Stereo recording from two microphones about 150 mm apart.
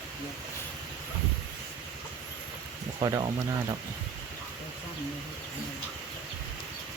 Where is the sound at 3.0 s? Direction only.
25° right (ahead or behind).